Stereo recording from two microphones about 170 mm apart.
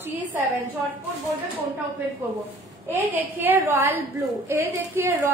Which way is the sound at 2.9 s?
15° right (ahead or behind).